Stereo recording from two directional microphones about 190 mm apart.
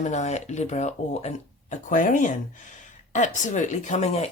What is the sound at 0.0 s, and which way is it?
Speech, 35° left (ahead or behind).